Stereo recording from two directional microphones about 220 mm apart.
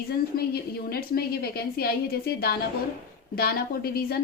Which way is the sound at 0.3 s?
45° left (ahead or behind).